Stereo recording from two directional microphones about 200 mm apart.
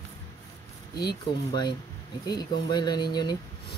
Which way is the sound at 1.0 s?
20° left (ahead or behind).